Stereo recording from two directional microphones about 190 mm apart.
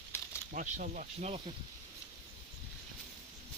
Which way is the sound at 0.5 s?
45° right (ahead or behind).